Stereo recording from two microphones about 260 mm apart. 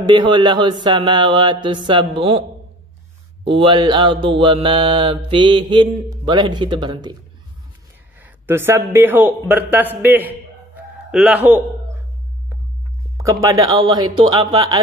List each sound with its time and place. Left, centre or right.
0.0 s mantra: centre
3.4 s mantra: centre
8.2 s mantra: centre
11.1 s speech: centre
13.2 s mantra: centre